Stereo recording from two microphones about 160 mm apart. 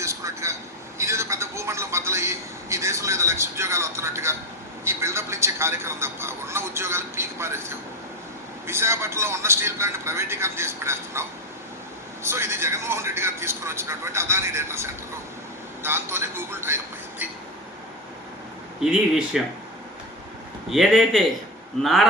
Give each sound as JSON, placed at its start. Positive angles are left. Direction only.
{"t": 0.0, "sound": "a sound", "side_deg": -20}
{"t": 0.9, "sound": "a man's voice", "side_deg": -15}
{"t": 18.8, "sound": "speech", "side_deg": -5}
{"t": 20.7, "sound": "speech", "side_deg": 0}